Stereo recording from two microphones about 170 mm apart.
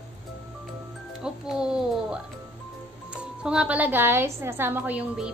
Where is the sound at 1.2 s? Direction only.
5° right (ahead or behind).